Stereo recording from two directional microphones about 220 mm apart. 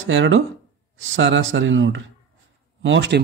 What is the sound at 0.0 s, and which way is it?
Speech, 60° right (ahead or behind).